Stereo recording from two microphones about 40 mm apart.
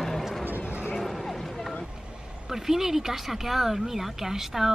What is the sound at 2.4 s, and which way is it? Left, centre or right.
Speech, centre.